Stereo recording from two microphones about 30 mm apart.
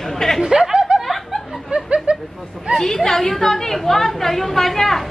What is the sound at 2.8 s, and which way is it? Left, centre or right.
Speech, centre.